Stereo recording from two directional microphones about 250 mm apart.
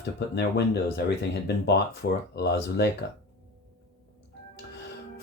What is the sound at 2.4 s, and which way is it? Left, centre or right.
Speech, left.